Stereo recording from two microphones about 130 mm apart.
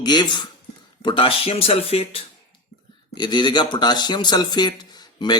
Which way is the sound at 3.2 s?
35° left (ahead or behind).